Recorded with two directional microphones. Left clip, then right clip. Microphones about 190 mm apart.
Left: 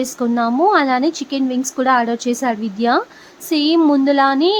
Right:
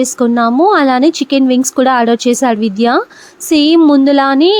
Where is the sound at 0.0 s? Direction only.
35° right (ahead or behind).